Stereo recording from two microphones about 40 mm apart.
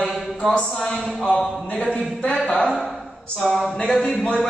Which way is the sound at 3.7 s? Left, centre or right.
Centre.